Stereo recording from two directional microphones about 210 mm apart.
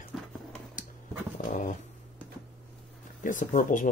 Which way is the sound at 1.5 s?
35° left (ahead or behind).